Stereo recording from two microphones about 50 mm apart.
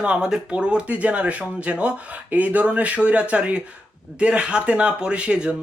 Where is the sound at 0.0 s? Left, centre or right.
Centre.